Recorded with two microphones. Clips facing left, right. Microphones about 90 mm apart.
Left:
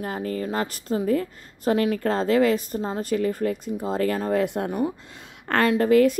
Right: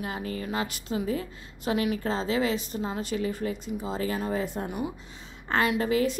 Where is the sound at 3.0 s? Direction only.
50° left (ahead or behind).